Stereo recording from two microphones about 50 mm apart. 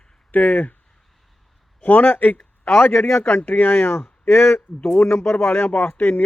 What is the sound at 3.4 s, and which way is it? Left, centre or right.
Speech, left.